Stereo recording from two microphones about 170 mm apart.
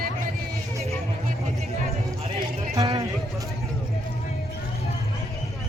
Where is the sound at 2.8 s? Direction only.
20° right (ahead or behind).